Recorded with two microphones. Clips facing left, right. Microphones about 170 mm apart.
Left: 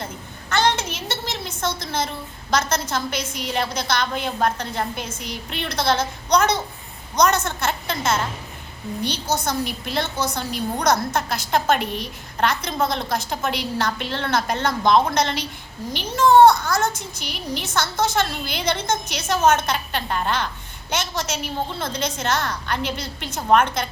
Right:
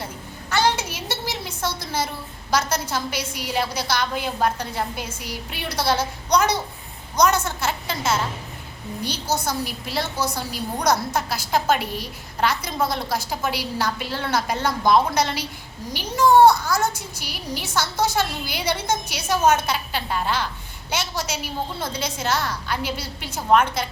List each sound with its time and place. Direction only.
0.5 s a sound: 10° right (ahead or behind)
2.5 s a woman's voice: 10° right (ahead or behind)
9.4 s a woman's voice: 5° right (ahead or behind)